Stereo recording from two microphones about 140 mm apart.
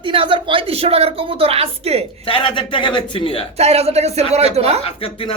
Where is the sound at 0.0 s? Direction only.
40° right (ahead or behind).